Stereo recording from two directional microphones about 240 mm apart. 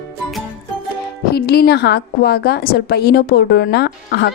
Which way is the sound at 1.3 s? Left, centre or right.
Left.